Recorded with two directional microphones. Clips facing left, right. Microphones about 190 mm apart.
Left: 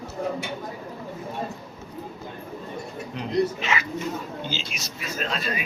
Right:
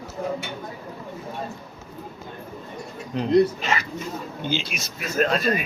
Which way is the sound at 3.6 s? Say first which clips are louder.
Right 1 dB; 35° right (ahead or behind).